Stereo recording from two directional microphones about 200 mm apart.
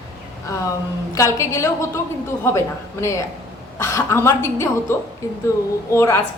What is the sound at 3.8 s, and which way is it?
A woman's voice, 15° left (ahead or behind).